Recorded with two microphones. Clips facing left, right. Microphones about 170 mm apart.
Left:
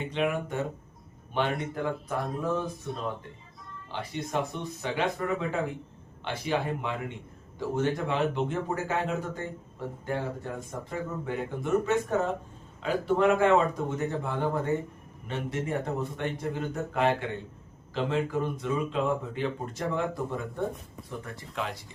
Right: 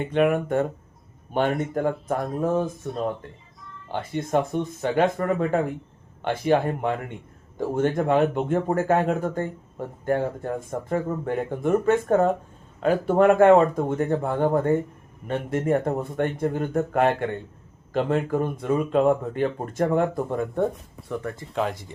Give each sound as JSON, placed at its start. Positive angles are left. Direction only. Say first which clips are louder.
{"t": 0.0, "sound": "speech", "louder": "right 8 dB", "side_deg": -50}
{"t": 21.1, "sound": "speech", "louder": "right 9 dB", "side_deg": -65}
{"t": 21.5, "sound": "speech", "louder": "right 8 dB", "side_deg": -45}